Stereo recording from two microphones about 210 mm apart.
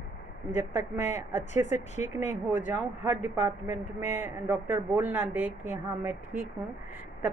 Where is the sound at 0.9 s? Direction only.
35° left (ahead or behind).